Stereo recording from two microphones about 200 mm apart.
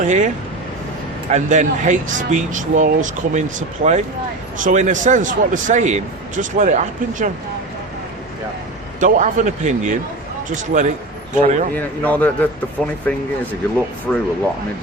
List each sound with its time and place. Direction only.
0.0 s a man's voice: 35° right (ahead or behind)
1.3 s a man's voice: 35° right (ahead or behind)
9.0 s a man's voice: 40° right (ahead or behind)
11.7 s speech: 10° left (ahead or behind)
14.1 s speech: 10° left (ahead or behind)